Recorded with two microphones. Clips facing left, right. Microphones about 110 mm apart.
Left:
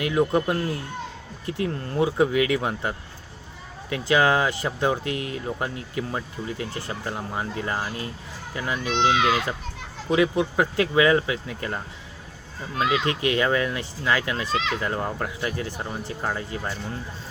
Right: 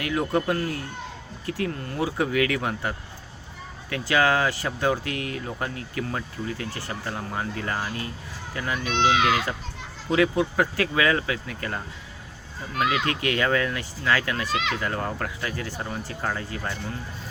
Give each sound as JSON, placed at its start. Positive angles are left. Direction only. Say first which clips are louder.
{"t": 0.0, "sound": "speech", "louder": "left 3 dB", "side_deg": 20}